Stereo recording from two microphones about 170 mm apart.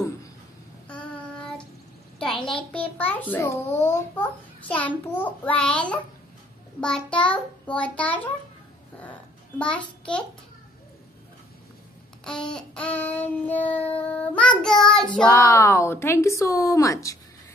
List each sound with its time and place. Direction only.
0.8 s child singing: 5° left (ahead or behind)
2.1 s a sound: 5° left (ahead or behind)
3.0 s a child's voice: 10° left (ahead or behind)
9.6 s a child's voice: 5° left (ahead or behind)
12.3 s a child's voice: 5° left (ahead or behind)
14.4 s child singing: 5° left (ahead or behind)
15.2 s a child's voice: 20° left (ahead or behind)